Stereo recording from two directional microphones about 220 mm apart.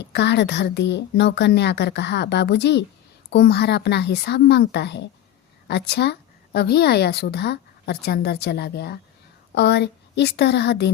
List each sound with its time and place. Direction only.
0.0 s a woman's voice: 50° left (ahead or behind)